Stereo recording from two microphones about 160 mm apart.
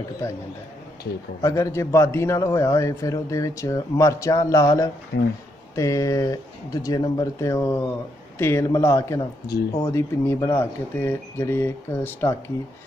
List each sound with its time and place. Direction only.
1.4 s a man's voice: 20° left (ahead or behind)
5.1 s speech: 90° left
5.8 s a man's voice: 20° left (ahead or behind)